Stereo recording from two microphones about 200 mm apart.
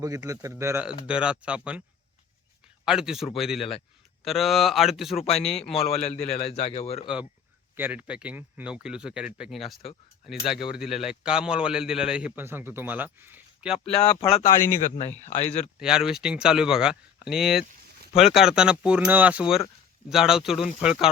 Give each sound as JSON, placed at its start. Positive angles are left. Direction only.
{"t": 0.0, "sound": "speech", "side_deg": -15}
{"t": 2.8, "sound": "speech", "side_deg": -5}
{"t": 3.6, "sound": "speech", "side_deg": 30}
{"t": 4.2, "sound": "speech", "side_deg": 0}
{"t": 5.8, "sound": "a man's voice", "side_deg": 35}
{"t": 7.8, "sound": "speech", "side_deg": -10}
{"t": 14.0, "sound": "speech", "side_deg": 25}
{"t": 14.7, "sound": "a man's voice", "side_deg": 40}
{"t": 15.8, "sound": "speech", "side_deg": -5}